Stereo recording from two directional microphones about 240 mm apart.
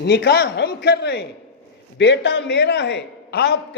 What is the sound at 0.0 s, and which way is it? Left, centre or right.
A man's voice, left.